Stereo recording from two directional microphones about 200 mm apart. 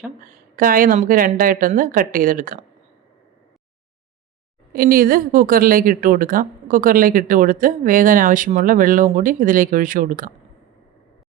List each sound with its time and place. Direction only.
0.5 s a woman's voice: 45° right (ahead or behind)
4.7 s a woman's voice: 50° right (ahead or behind)